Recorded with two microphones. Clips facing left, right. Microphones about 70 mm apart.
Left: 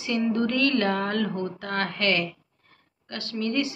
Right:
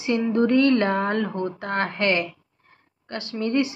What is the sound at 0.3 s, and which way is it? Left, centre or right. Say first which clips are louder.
Speech: right 7 dB; right.